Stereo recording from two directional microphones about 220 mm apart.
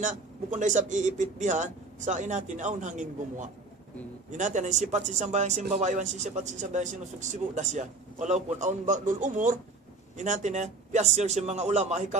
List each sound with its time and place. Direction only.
0.0 s speech: 35° right (ahead or behind)